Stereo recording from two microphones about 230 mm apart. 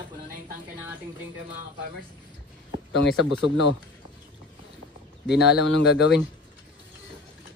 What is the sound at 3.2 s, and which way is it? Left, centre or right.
Speech, right.